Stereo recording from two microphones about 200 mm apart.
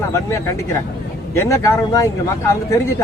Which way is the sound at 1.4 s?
15° left (ahead or behind).